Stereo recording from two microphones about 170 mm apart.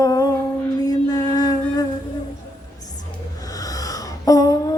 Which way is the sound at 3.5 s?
20° left (ahead or behind).